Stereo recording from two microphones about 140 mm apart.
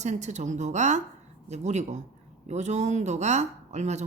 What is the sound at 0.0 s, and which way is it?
Speech, 55° right (ahead or behind).